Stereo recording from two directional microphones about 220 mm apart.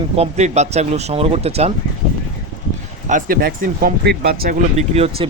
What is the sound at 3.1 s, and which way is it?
Speech, 40° right (ahead or behind).